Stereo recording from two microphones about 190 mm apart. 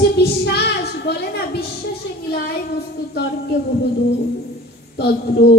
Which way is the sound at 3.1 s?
60° left (ahead or behind).